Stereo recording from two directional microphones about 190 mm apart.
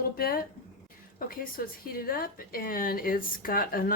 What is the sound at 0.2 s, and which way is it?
A woman's voice, 50° left (ahead or behind).